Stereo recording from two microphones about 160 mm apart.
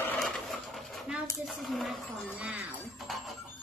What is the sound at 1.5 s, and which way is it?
Music, centre (ahead or behind).